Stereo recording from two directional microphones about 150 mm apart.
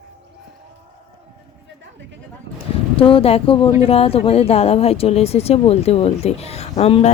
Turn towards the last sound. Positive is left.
turn(degrees=45)  # may be behind; listen again after turning